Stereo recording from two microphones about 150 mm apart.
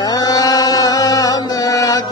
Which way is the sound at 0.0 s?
25° left (ahead or behind).